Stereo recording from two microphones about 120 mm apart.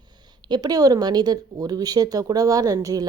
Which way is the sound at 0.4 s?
35° right (ahead or behind).